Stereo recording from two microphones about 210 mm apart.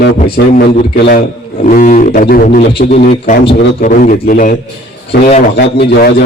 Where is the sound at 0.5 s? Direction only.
40° left (ahead or behind).